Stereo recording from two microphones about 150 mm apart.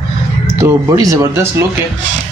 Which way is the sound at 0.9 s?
25° right (ahead or behind).